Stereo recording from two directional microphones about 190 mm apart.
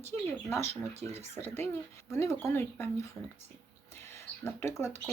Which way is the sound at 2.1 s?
15° left (ahead or behind).